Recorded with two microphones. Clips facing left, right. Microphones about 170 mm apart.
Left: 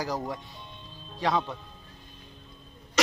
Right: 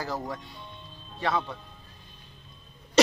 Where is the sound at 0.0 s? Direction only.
15° left (ahead or behind).